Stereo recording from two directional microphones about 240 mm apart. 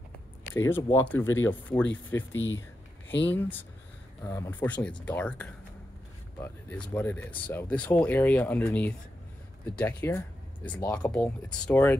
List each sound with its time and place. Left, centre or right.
0.6 s speech: centre
2.3 s speech: left
4.2 s speech: centre
6.8 s speech: centre